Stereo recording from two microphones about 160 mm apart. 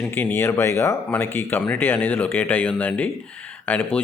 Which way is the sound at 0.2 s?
15° left (ahead or behind).